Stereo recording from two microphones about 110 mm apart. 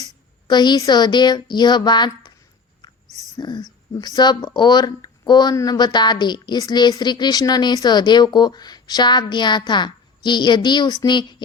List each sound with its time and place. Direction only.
0.0 s speech: 40° left (ahead or behind)
3.3 s a woman's voice: 40° left (ahead or behind)